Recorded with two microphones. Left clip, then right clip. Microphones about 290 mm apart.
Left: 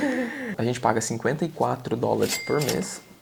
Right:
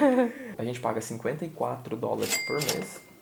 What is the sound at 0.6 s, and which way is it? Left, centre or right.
Speech, left.